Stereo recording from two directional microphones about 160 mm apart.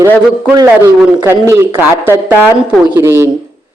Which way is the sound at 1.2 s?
15° right (ahead or behind).